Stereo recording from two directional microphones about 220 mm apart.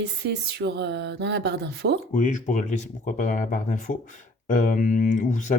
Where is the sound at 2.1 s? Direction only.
35° left (ahead or behind).